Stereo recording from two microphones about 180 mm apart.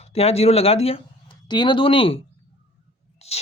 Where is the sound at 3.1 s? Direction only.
35° left (ahead or behind).